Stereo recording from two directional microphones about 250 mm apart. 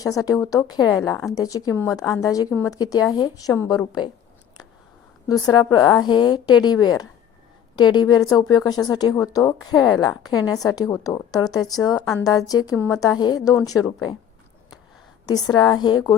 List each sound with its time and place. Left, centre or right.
0.0 s speech: centre
5.3 s speech: centre
15.3 s speech: centre